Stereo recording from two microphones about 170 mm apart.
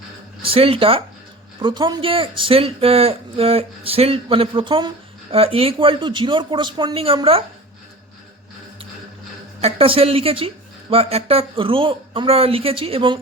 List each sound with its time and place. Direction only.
0.4 s speech: 35° right (ahead or behind)
9.6 s speech: 35° right (ahead or behind)